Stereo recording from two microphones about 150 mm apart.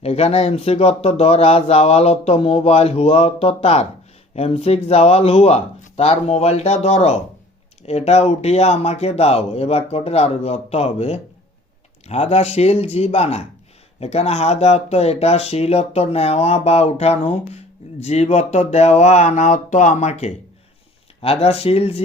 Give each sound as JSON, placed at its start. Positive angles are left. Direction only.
{"t": 0.0, "sound": "speech", "side_deg": 45}